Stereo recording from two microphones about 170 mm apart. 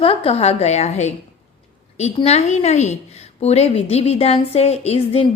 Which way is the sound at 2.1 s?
40° left (ahead or behind).